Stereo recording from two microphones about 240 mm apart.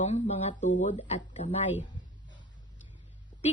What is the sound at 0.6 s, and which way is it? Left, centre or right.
Speech, left.